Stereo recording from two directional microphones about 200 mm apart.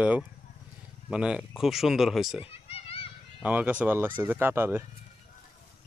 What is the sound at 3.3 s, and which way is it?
Speech, 5° right (ahead or behind).